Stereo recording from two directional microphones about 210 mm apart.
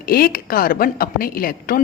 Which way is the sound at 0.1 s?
45° left (ahead or behind).